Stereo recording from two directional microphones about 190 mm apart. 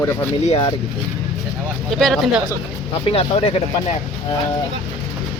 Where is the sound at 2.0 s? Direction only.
Centre (ahead or behind).